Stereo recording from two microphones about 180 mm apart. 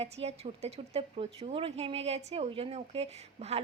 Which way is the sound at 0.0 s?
35° right (ahead or behind).